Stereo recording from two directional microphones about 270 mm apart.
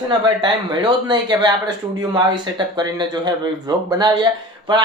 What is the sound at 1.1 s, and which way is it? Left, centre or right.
Speech, centre.